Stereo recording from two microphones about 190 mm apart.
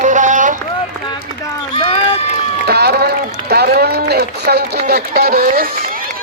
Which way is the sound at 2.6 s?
60° right (ahead or behind).